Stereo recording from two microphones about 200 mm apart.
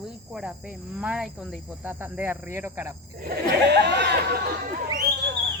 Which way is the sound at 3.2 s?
55° right (ahead or behind).